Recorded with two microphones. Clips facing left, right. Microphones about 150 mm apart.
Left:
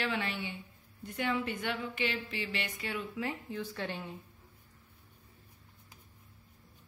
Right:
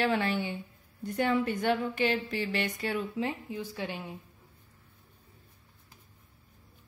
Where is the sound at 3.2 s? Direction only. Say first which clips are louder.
Right 3 dB; 15° right (ahead or behind).